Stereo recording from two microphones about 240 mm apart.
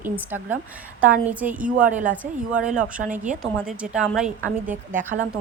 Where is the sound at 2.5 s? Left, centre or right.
Centre.